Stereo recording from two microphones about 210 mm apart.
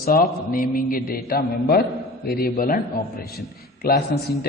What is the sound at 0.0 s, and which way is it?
A man's voice, 40° left (ahead or behind).